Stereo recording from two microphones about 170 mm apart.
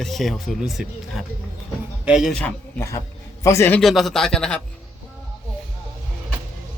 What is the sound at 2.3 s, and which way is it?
A man's voice, 10° left (ahead or behind).